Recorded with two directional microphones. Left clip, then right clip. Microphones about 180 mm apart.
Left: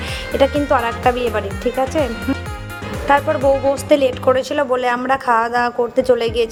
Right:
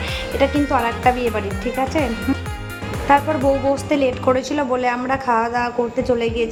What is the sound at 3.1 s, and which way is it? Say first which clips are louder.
A woman's voice: left 2 dB; 25° left (ahead or behind).